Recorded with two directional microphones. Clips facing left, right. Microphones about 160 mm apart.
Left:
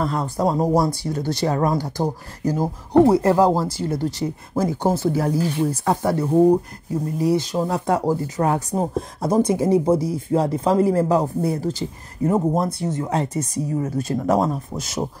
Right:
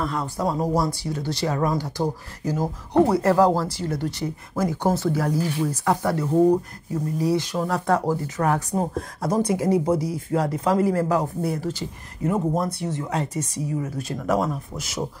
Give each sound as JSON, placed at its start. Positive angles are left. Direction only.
{"t": 0.1, "sound": "speech", "side_deg": 35}
{"t": 3.1, "sound": "speech", "side_deg": 20}